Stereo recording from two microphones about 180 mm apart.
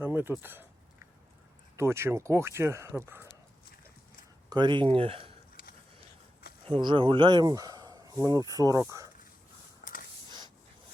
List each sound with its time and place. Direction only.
0.0 s speech: 10° right (ahead or behind)
1.7 s speech: 15° right (ahead or behind)
4.4 s speech: 25° right (ahead or behind)
6.7 s speech: 25° right (ahead or behind)
9.8 s printer: 50° left (ahead or behind)
10.2 s snort: 25° right (ahead or behind)